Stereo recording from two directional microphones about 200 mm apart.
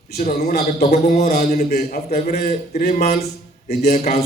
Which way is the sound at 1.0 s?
35° left (ahead or behind).